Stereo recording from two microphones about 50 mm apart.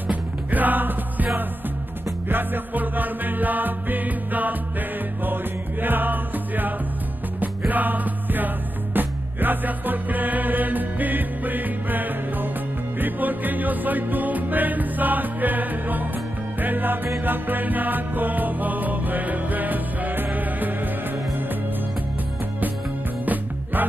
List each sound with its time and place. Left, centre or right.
0.1 s music: right
23.2 s music: right